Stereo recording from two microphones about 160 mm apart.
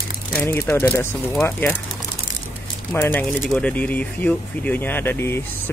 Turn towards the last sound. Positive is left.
turn(degrees=15)  # may be behind; listen again after turning